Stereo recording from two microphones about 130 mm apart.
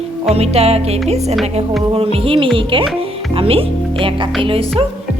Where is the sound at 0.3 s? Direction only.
50° right (ahead or behind).